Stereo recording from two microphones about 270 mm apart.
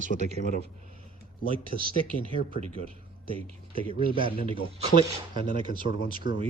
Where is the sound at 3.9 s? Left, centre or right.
Centre.